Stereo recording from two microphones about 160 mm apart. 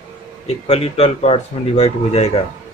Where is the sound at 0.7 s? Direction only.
40° left (ahead or behind).